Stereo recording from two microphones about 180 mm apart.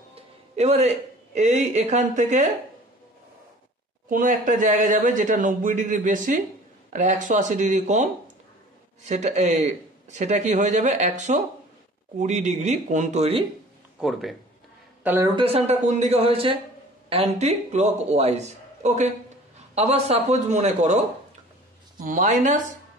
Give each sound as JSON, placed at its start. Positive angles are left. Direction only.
{"t": 0.1, "sound": "speech", "side_deg": -35}
{"t": 4.1, "sound": "a man's voice", "side_deg": -45}
{"t": 13.9, "sound": "speech", "side_deg": 0}
{"t": 15.0, "sound": "speech", "side_deg": -15}
{"t": 15.3, "sound": "a man's voice", "side_deg": -35}
{"t": 22.0, "sound": "a man's voice", "side_deg": -45}